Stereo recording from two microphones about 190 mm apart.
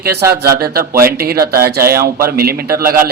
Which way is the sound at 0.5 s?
55° right (ahead or behind).